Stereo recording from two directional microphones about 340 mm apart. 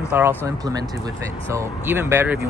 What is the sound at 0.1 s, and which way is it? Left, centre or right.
Speech, centre.